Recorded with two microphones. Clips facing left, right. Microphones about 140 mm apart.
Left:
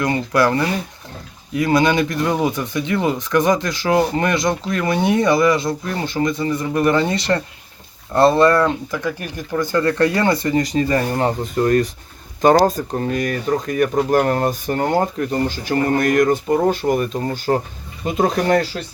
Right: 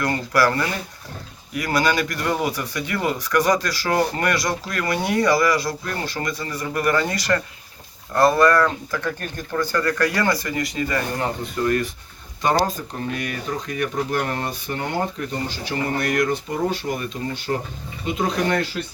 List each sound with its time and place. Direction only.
0.0 s speech: 20° left (ahead or behind)
9.0 s speech: 10° left (ahead or behind)
9.7 s speech: 25° left (ahead or behind)